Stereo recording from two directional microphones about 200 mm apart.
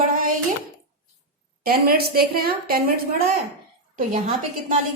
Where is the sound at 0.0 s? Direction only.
45° right (ahead or behind).